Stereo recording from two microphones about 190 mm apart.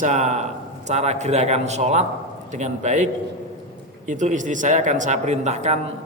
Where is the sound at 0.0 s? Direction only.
40° right (ahead or behind).